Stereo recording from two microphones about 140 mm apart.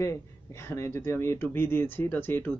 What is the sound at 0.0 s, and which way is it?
Speech, 20° left (ahead or behind).